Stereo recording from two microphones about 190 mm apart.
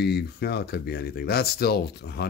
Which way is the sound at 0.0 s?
60° left (ahead or behind).